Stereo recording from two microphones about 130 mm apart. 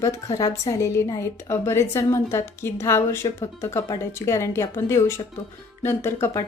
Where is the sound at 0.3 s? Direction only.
25° left (ahead or behind).